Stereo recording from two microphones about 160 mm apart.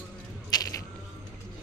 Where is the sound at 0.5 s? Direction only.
25° left (ahead or behind).